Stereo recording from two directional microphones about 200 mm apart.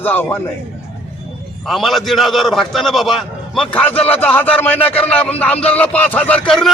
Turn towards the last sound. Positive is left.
turn(degrees=5)  # may be behind; listen again after turning